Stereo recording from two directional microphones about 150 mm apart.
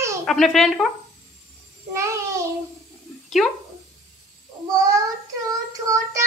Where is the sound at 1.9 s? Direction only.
20° right (ahead or behind).